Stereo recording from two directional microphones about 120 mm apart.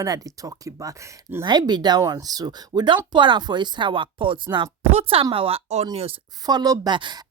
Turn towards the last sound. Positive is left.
turn(degrees=-35)  # may be behind; listen again after turning